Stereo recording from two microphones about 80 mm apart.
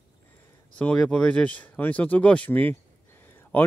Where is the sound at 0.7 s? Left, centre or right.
Centre.